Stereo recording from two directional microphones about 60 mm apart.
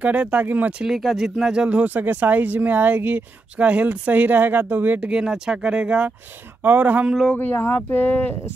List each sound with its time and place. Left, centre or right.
0.0 s speech: right
0.8 s speech: centre
1.8 s speech: right
5.1 s speech: centre
6.6 s speech: right
7.3 s speech: left